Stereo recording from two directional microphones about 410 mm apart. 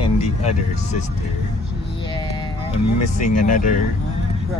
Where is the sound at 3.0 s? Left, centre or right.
Centre.